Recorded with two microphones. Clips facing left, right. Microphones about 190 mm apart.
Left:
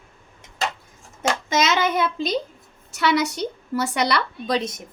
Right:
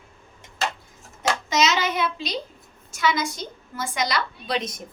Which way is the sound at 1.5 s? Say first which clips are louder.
Left 2 dB; 55° left (ahead or behind).